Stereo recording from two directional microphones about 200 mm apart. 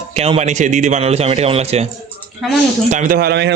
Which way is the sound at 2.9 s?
45° right (ahead or behind).